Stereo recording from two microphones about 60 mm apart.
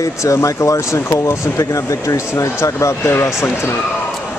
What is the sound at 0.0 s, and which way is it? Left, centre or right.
Speech, left.